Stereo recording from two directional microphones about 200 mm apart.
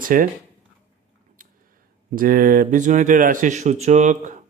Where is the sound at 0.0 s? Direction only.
45° right (ahead or behind).